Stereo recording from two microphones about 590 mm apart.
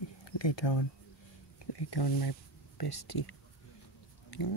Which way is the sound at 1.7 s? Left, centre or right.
Left.